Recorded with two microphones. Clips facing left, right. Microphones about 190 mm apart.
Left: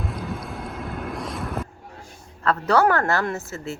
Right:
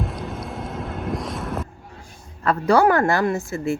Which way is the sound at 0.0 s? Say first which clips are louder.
Right 2 dB; centre (ahead or behind).